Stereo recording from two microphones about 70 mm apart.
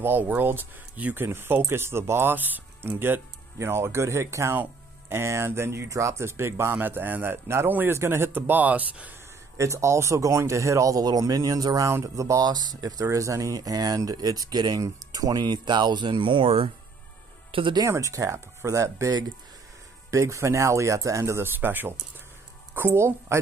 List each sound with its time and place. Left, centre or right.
0.0 s speech: right
3.5 s speech: right
9.6 s speech: right
12.4 s speech: right
13.0 s speech: right
14.8 s speech: right
17.8 s speech: right
21.5 s speech: right